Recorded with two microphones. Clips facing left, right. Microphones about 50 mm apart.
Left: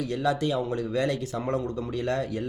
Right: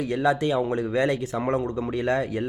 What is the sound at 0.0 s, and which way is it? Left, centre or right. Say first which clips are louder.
Speech: right 3 dB; right.